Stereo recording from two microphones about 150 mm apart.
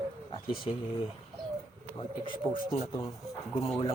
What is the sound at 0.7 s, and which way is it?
Speech, 35° left (ahead or behind).